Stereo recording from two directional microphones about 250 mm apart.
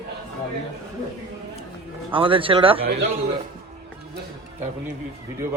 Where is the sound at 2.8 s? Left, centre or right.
Right.